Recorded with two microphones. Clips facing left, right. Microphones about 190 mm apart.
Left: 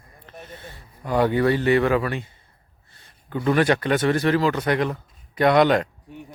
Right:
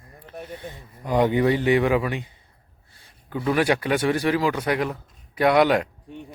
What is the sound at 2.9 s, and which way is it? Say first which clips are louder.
Speech: left 1 dB; 10° right (ahead or behind).